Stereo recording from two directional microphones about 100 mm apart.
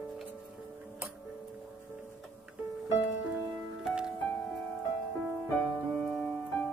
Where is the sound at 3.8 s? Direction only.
5° right (ahead or behind).